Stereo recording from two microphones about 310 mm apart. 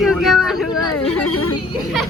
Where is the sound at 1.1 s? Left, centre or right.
Left.